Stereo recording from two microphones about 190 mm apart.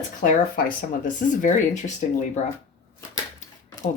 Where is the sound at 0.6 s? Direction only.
45° left (ahead or behind).